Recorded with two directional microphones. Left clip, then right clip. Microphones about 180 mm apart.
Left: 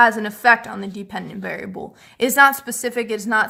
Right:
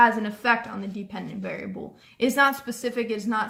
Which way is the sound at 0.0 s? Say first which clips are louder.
Left 5 dB; 55° left (ahead or behind).